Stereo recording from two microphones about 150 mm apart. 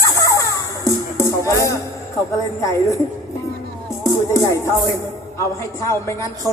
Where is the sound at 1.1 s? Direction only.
20° left (ahead or behind).